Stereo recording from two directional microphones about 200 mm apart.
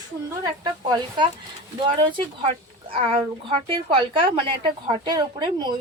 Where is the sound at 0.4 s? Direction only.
20° right (ahead or behind).